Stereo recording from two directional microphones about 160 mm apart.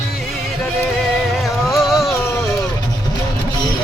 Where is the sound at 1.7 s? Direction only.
Centre (ahead or behind).